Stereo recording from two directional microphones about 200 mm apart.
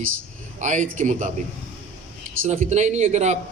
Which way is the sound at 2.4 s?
40° right (ahead or behind).